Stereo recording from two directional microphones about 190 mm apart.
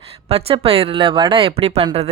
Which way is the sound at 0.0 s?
30° right (ahead or behind).